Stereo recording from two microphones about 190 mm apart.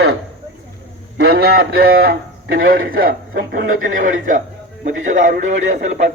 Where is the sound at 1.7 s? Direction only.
50° right (ahead or behind).